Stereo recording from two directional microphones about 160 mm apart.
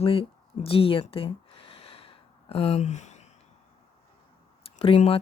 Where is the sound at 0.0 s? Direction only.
35° left (ahead or behind).